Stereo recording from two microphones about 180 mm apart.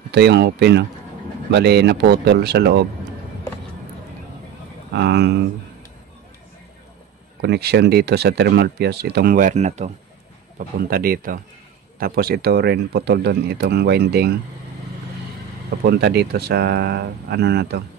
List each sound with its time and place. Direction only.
0.1 s speech: 70° right (ahead or behind)
4.9 s speech: 70° right (ahead or behind)
7.4 s speech: 65° right (ahead or behind); by 9.9 s 40° right (ahead or behind)
10.9 s speech: 55° right (ahead or behind)
15.8 s speech: 65° right (ahead or behind)